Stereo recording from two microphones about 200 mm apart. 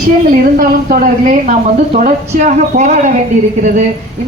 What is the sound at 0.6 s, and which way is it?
A woman's voice, 45° right (ahead or behind).